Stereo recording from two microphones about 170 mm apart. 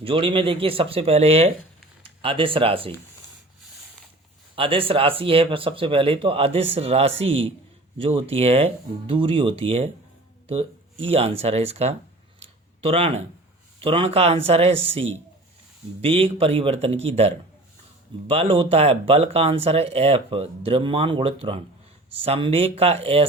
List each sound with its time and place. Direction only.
0.0 s speech: 30° right (ahead or behind)
4.5 s speech: 30° right (ahead or behind)
11.0 s speech: 35° right (ahead or behind)